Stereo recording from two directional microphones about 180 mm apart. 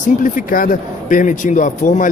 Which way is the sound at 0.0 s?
50° left (ahead or behind).